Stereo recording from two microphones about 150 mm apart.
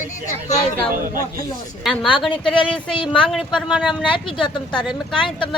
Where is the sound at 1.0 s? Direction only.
65° right (ahead or behind).